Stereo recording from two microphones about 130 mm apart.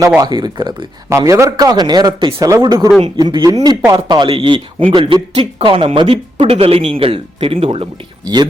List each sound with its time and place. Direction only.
0.2 s speech: 35° right (ahead or behind)
1.1 s speech: 25° right (ahead or behind); by 7.9 s 45° right (ahead or behind)